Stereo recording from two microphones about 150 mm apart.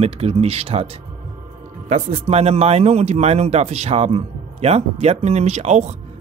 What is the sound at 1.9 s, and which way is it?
A man's voice, 45° right (ahead or behind).